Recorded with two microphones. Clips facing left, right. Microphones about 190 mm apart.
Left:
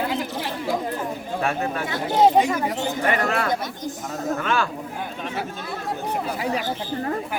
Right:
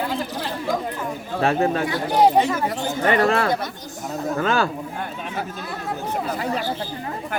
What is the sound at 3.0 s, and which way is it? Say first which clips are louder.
Speech: right 5 dB; 30° right (ahead or behind).